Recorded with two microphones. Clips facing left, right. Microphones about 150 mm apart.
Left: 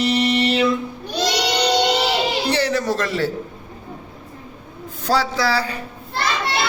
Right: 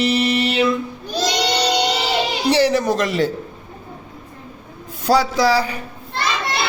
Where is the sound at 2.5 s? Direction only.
15° right (ahead or behind).